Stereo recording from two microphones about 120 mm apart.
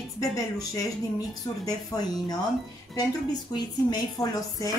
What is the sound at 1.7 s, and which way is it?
Speech, 30° left (ahead or behind).